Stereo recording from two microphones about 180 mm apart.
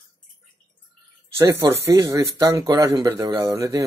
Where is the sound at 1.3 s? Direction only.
15° right (ahead or behind).